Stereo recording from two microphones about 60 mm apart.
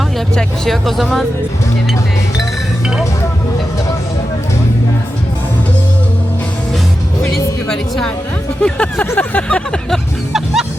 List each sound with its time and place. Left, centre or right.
0.3 s speech: centre
7.7 s speech: centre
8.6 s a sound: centre
10.3 s music: centre